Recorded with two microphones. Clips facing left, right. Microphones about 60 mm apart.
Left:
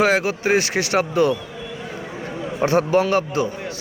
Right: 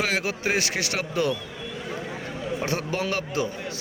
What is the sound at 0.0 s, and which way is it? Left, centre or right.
Speech, left.